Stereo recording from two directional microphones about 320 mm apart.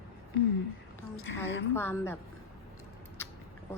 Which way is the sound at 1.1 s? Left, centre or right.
Left.